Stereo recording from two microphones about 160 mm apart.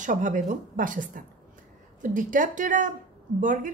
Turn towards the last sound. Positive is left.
turn(degrees=-55)  # may be behind; listen again after turning